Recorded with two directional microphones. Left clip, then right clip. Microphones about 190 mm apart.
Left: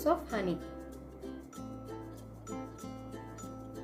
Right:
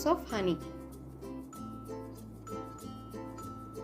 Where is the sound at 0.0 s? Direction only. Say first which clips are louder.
Right 1 dB; 45° right (ahead or behind).